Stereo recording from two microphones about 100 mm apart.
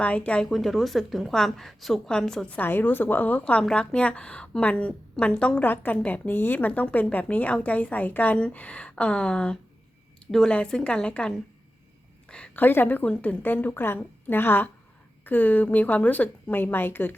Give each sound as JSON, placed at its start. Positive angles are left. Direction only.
{"t": 0.0, "sound": "a woman's voice", "side_deg": 10}
{"t": 2.6, "sound": "a woman's voice", "side_deg": 20}